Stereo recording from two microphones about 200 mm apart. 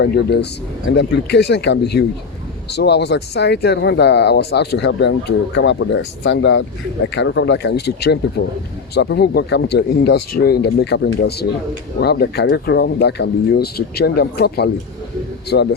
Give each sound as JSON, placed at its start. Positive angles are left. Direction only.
{"t": 0.0, "sound": "speech", "side_deg": 55}